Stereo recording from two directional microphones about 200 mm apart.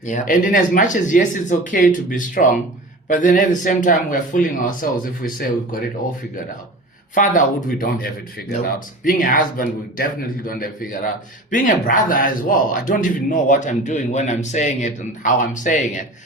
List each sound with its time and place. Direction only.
0.0 s speech: 40° left (ahead or behind)
7.1 s speech: 40° left (ahead or behind)